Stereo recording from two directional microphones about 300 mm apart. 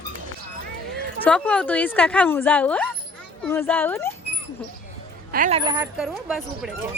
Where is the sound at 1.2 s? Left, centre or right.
Centre.